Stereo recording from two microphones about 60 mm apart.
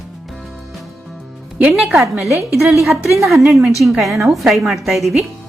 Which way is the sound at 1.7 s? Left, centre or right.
Centre.